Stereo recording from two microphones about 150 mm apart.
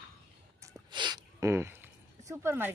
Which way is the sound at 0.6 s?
30° right (ahead or behind).